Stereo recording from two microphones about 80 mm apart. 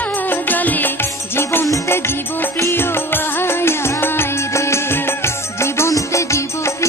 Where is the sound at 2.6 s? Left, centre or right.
Left.